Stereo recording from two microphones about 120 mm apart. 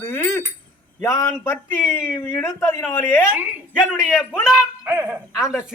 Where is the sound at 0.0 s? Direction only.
20° left (ahead or behind).